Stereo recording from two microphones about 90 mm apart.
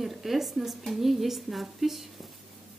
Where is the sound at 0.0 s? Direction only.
Centre (ahead or behind).